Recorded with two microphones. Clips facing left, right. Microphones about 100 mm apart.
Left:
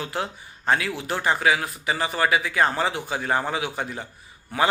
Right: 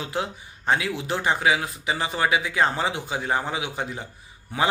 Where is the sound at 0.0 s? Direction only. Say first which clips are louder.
Even; 15° right (ahead or behind).